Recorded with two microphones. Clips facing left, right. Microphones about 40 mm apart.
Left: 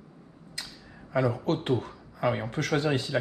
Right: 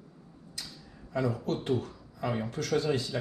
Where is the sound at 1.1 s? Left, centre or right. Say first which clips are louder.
Left 4 dB; left.